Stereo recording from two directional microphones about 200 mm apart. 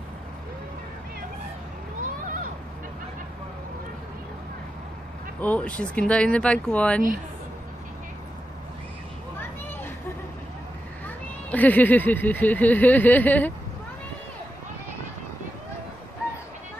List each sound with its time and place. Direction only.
2.0 s vehicle: 45° right (ahead or behind)
5.4 s speech: 5° left (ahead or behind)
11.1 s speech: 10° left (ahead or behind)